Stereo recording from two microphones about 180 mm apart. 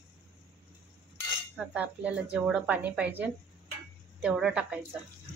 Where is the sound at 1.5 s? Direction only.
5° right (ahead or behind).